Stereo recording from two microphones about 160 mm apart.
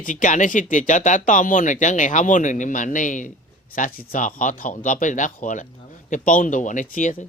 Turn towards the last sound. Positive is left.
turn(degrees=50)  # may be behind; listen again after turning